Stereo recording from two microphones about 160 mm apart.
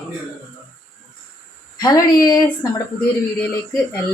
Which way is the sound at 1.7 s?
25° left (ahead or behind).